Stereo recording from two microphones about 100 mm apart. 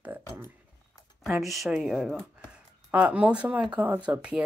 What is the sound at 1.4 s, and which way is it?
Speech, centre (ahead or behind).